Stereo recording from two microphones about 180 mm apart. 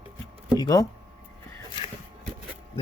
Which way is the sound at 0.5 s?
20° left (ahead or behind).